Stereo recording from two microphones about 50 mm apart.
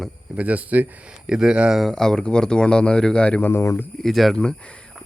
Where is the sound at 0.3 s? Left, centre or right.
Right.